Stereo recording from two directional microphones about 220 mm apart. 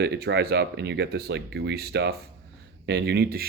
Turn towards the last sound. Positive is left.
turn(degrees=-45)  # may be behind; listen again after turning